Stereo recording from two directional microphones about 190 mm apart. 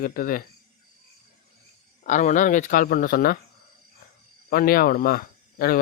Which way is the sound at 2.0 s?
40° left (ahead or behind).